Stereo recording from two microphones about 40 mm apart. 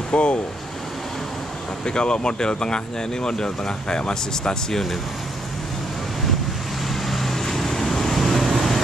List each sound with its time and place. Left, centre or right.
0.1 s speech: left
1.9 s speech: left
6.9 s vehicle: centre